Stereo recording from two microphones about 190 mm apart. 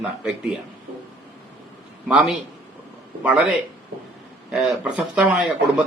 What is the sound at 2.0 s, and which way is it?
A man's voice, 5° right (ahead or behind).